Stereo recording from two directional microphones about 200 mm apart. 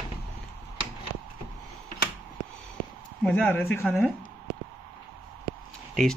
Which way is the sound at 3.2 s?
5° left (ahead or behind).